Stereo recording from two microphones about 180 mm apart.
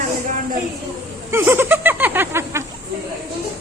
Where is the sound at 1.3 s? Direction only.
15° right (ahead or behind).